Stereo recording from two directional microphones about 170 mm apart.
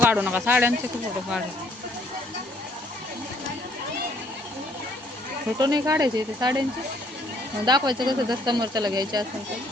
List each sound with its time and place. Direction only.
0.0 s speech: 10° right (ahead or behind)
5.5 s speech: 25° right (ahead or behind)
7.6 s speech: 25° right (ahead or behind)